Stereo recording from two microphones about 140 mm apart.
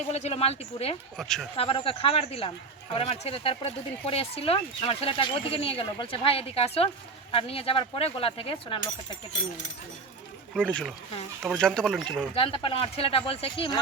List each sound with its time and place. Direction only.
0.1 s speech: 50° left (ahead or behind)
1.1 s speech: centre (ahead or behind)
1.5 s speech: 40° left (ahead or behind)
10.7 s speech: 5° left (ahead or behind)
12.3 s speech: 40° left (ahead or behind)